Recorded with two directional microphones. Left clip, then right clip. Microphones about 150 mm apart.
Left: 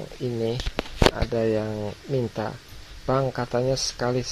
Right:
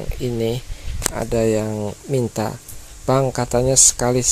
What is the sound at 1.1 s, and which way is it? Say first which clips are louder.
Speech: right 5 dB; 35° right (ahead or behind).